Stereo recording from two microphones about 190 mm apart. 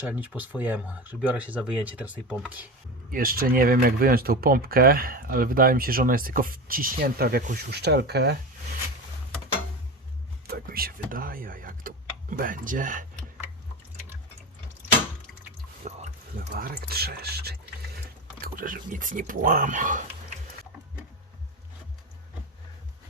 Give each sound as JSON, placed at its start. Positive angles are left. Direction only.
{"t": 0.0, "sound": "speech", "side_deg": -10}
{"t": 3.1, "sound": "speech", "side_deg": -50}
{"t": 10.4, "sound": "speech", "side_deg": -50}
{"t": 15.8, "sound": "a sound", "side_deg": -40}
{"t": 16.5, "sound": "speech", "side_deg": -50}